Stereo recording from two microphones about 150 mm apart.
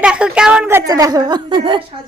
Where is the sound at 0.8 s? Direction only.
25° right (ahead or behind).